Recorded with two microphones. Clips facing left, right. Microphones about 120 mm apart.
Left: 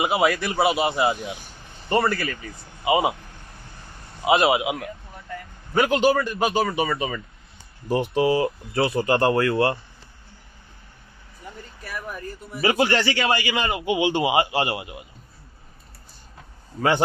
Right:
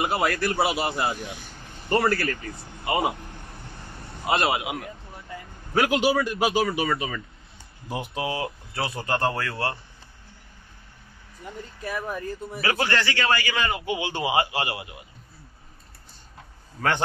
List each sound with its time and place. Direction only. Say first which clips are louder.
0.0 s speech: left 3 dB; 5° left (ahead or behind)
4.2 s speech: left 5 dB; 5° left (ahead or behind)
5.8 s a man's voice: left 2 dB; 10° right (ahead or behind); by 9.8 s 15° left (ahead or behind)
11.9 s speech: right 3 dB; 25° right (ahead or behind)
12.5 s a man's voice: left 5 dB; 15° left (ahead or behind)